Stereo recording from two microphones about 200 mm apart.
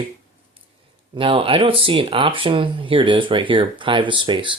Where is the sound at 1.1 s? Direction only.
25° right (ahead or behind).